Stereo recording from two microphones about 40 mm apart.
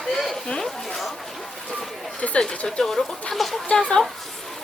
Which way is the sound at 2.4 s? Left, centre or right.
Centre.